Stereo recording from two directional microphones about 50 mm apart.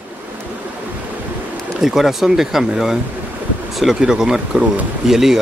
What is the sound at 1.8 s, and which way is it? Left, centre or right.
Speech, centre.